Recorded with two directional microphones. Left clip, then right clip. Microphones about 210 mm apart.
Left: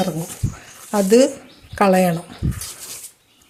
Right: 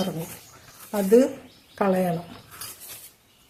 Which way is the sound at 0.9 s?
40° left (ahead or behind).